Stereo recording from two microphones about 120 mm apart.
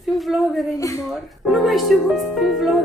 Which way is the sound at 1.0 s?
Centre (ahead or behind).